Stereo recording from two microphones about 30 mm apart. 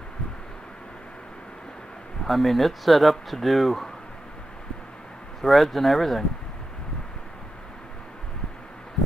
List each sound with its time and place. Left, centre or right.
2.2 s speech: centre
5.4 s speech: centre